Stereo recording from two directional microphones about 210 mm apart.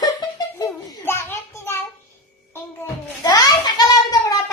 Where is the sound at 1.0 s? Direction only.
10° left (ahead or behind).